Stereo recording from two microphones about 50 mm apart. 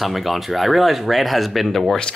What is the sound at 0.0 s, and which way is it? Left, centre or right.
Speech, centre.